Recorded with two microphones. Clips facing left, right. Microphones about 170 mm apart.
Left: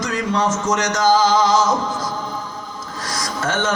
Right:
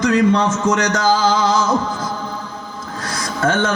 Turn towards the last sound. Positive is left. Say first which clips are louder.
# right 5 dB
turn(degrees=-55)  # may be behind; listen again after turning